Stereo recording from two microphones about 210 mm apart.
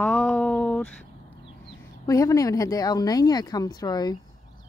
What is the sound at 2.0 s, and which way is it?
Speech, 15° left (ahead or behind).